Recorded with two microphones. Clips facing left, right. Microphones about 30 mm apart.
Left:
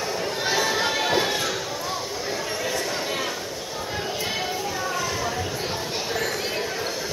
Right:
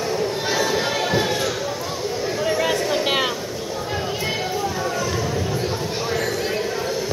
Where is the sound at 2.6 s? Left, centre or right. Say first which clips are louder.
Right 6 dB; right.